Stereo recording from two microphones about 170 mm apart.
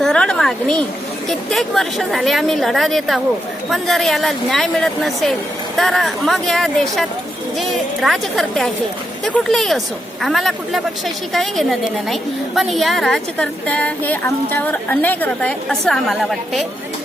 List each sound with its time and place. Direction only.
0.0 s a woman's voice: 5° left (ahead or behind)